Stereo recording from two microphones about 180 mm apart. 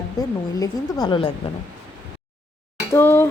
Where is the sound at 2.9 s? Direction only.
15° left (ahead or behind).